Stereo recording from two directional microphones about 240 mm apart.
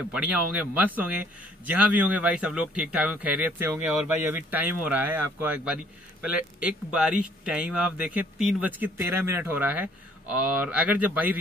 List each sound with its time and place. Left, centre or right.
0.1 s a man's voice: centre